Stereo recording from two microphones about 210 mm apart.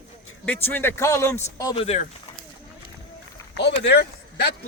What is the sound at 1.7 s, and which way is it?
Speech, 30° left (ahead or behind).